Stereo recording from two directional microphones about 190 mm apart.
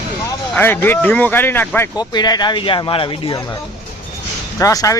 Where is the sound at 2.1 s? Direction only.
20° left (ahead or behind).